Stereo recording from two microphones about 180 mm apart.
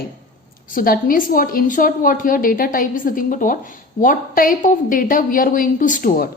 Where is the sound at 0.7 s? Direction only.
50° left (ahead or behind).